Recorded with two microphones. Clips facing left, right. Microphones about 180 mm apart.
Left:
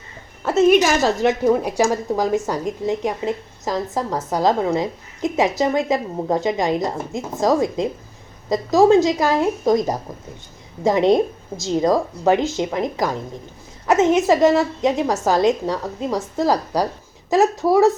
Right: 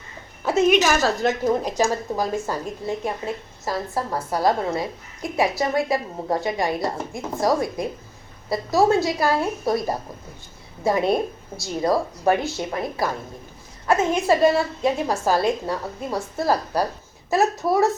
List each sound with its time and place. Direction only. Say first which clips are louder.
0.7 s a woman's voice: left 3 dB; 10° left (ahead or behind)